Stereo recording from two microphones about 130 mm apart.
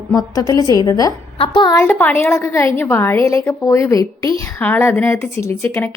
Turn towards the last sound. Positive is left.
turn(degrees=20)  # may be behind; listen again after turning